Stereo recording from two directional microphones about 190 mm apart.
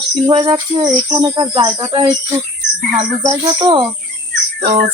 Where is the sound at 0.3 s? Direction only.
25° right (ahead or behind).